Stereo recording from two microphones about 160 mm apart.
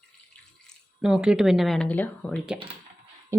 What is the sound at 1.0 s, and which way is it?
Speech, 5° right (ahead or behind).